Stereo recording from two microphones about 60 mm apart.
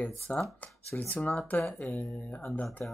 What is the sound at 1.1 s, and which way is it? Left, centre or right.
Speech, left.